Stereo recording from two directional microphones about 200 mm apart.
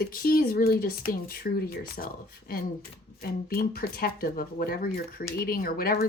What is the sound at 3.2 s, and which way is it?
Speech, 50° left (ahead or behind).